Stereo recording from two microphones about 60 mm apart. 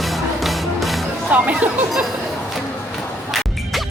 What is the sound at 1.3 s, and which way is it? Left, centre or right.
Speech, right.